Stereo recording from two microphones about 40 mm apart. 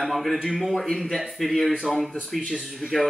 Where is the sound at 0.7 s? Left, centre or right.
Centre.